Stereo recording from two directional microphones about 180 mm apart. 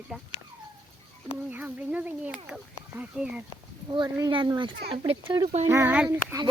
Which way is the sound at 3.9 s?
25° right (ahead or behind).